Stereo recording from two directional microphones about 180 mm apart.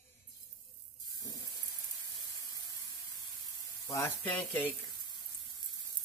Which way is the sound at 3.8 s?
15° left (ahead or behind).